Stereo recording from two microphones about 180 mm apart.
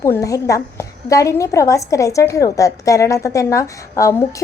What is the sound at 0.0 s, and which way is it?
A woman's voice, 15° left (ahead or behind).